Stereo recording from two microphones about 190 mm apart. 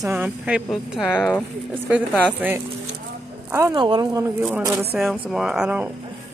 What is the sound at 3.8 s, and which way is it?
Speech, 25° right (ahead or behind).